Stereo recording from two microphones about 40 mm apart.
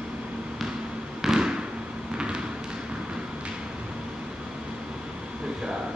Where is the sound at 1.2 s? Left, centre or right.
Centre.